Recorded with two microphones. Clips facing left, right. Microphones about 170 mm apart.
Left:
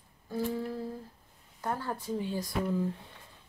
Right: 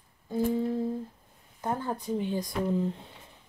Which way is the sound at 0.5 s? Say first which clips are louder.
Right 7 dB; 20° right (ahead or behind).